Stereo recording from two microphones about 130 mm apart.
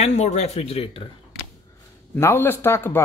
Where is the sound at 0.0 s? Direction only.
55° left (ahead or behind).